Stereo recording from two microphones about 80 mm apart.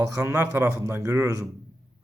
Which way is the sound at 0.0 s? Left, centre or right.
Right.